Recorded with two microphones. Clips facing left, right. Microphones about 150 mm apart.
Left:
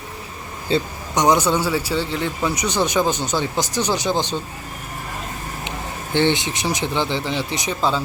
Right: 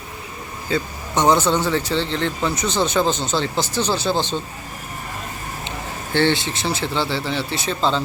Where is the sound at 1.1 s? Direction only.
15° left (ahead or behind).